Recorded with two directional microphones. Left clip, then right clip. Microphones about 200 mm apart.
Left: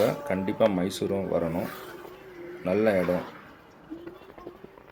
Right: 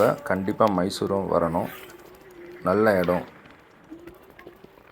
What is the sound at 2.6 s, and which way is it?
Speech, 15° right (ahead or behind).